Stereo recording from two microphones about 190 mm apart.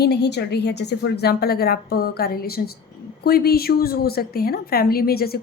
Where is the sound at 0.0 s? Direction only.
60° left (ahead or behind).